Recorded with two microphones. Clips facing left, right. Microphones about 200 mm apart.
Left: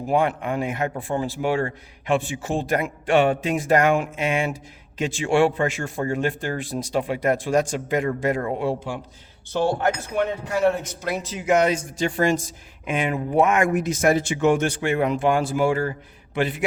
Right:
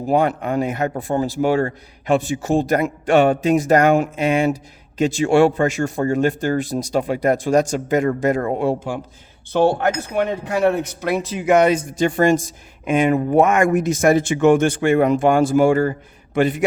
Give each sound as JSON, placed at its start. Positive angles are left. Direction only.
{"t": 0.0, "sound": "a man's voice", "side_deg": -35}
{"t": 9.5, "sound": "speech", "side_deg": -60}